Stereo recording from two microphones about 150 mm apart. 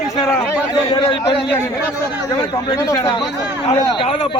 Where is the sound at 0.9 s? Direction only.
35° left (ahead or behind).